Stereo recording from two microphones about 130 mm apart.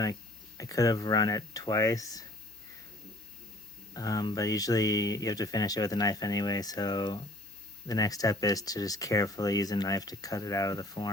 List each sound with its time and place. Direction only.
0.0 s speech: 25° left (ahead or behind)
3.9 s speech: 30° left (ahead or behind)